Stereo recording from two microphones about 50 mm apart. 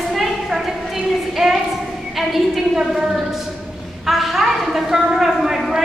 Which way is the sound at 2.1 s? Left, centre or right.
Centre.